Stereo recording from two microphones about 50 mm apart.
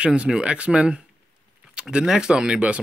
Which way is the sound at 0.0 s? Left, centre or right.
Right.